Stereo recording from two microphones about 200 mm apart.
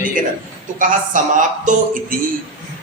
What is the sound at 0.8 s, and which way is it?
A man's voice, 40° right (ahead or behind).